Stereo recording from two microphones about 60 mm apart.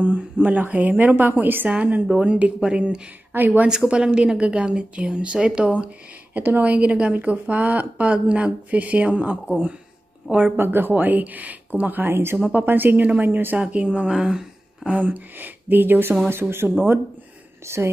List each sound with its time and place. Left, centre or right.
0.0 s speech: right
3.3 s speech: right
3.6 s speech: centre
6.3 s speech: right
10.5 s speech: right
13.6 s speech: right
14.1 s speech: centre
14.9 s speech: right
17.7 s speech: right